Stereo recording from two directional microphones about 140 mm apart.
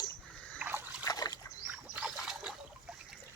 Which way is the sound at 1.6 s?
10° right (ahead or behind).